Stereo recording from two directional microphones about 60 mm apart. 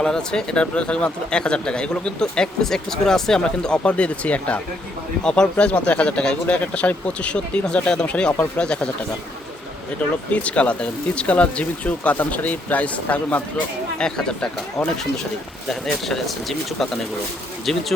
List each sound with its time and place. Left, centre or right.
0.0 s speech: centre
10.3 s speech: left
14.0 s speech: centre
15.7 s speech: centre